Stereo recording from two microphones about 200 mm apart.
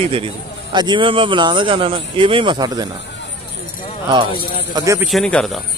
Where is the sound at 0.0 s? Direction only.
25° right (ahead or behind).